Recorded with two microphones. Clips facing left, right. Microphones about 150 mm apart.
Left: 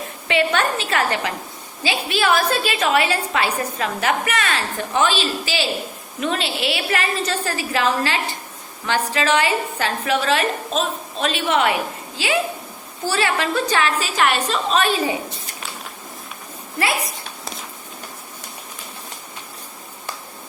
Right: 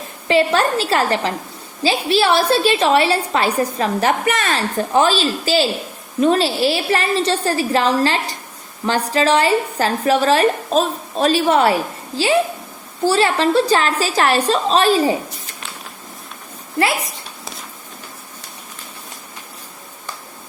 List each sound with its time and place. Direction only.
0.3 s a woman's voice: 35° right (ahead or behind)